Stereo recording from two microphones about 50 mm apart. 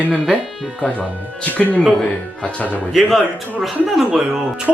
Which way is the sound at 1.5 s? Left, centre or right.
Left.